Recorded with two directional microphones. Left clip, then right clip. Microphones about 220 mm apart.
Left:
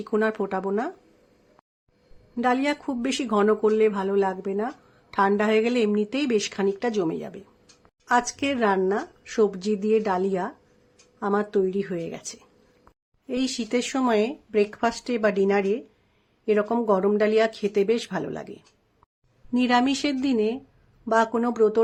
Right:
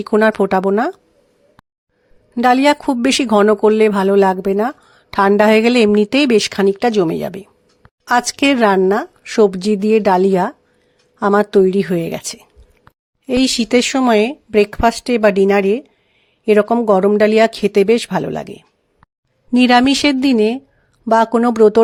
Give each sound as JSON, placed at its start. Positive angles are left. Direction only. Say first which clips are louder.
{"t": 0.0, "sound": "speech", "louder": "right 11 dB", "side_deg": -40}
{"t": 2.3, "sound": "speech", "louder": "right 12 dB", "side_deg": -45}